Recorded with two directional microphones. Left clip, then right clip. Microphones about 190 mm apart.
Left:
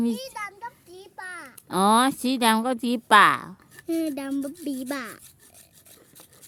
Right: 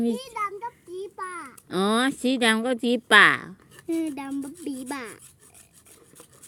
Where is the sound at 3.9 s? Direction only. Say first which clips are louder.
Left 1 dB; 50° left (ahead or behind).